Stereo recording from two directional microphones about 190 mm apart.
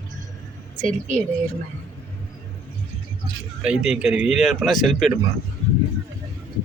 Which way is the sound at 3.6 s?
5° right (ahead or behind).